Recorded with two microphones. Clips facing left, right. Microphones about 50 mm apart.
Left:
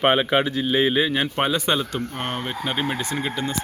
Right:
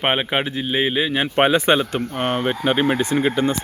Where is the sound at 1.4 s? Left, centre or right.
Right.